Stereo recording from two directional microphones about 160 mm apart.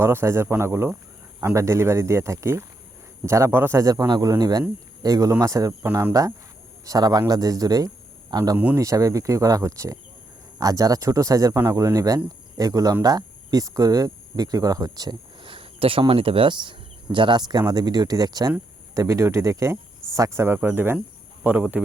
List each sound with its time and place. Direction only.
0.0 s a man's voice: 15° right (ahead or behind)
8.5 s speech: 15° right (ahead or behind)